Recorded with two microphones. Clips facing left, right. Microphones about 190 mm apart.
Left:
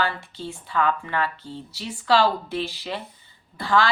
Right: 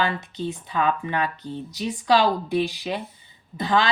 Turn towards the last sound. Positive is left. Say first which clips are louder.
# even
turn(degrees=-20)  # may be behind; listen again after turning